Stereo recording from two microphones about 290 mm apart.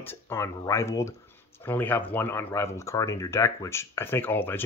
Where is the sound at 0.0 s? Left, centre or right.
Centre.